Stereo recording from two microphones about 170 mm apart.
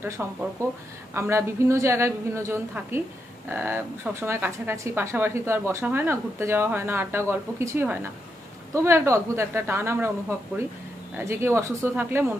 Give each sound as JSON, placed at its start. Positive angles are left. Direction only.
{"t": 0.2, "sound": "a woman's voice", "side_deg": -10}